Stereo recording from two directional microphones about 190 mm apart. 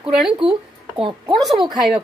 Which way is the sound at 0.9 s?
25° right (ahead or behind).